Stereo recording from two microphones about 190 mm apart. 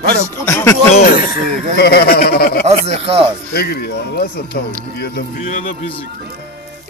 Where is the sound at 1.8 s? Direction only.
60° left (ahead or behind).